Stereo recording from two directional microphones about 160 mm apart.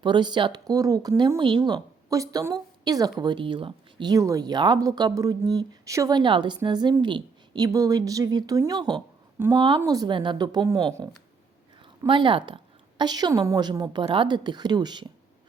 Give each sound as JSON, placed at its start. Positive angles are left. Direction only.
{"t": 0.0, "sound": "a woman's voice", "side_deg": -30}